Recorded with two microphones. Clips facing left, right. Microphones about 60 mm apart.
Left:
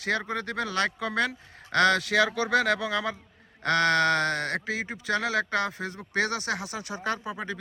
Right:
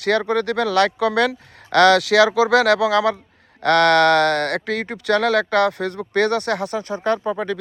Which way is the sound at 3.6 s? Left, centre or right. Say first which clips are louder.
Right 9 dB; right.